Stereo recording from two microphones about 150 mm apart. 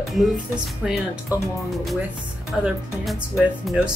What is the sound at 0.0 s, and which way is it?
Speech, centre (ahead or behind).